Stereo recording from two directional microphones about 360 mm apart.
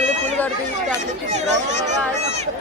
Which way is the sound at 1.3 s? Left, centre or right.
Centre.